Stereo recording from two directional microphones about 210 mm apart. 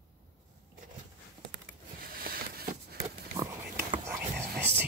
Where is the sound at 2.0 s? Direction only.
45° right (ahead or behind).